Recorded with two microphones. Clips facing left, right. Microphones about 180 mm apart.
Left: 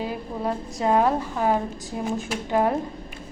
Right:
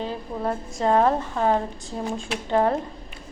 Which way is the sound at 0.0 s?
5° left (ahead or behind).